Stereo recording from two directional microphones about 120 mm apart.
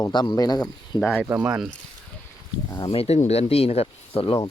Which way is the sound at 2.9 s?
60° left (ahead or behind).